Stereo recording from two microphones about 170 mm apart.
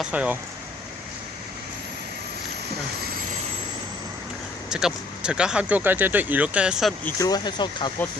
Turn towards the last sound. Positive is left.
turn(degrees=25)  # may be behind; listen again after turning